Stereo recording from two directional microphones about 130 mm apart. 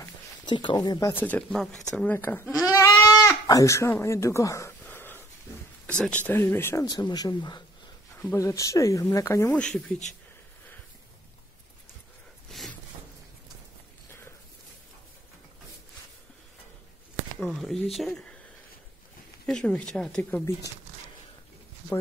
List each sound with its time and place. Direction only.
0.5 s speech: 35° left (ahead or behind)
1.1 s speech: 10° left (ahead or behind)
2.1 s speech: 15° left (ahead or behind)
2.5 s goat: 25° left (ahead or behind)
5.9 s speech: 10° left (ahead or behind); by 9.5 s 25° left (ahead or behind)
9.5 s speech: 10° left (ahead or behind)
12.4 s a sound: centre (ahead or behind)
17.4 s speech: 5° left (ahead or behind)
19.4 s speech: 5° left (ahead or behind)